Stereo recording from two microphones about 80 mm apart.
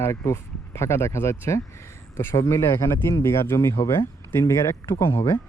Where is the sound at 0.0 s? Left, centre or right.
Left.